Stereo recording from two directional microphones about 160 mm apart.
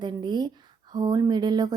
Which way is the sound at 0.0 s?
30° right (ahead or behind).